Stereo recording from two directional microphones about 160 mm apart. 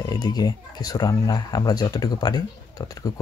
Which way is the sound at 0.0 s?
25° left (ahead or behind).